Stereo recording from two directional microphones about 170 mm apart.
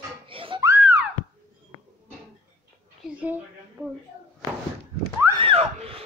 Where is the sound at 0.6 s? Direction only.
15° right (ahead or behind).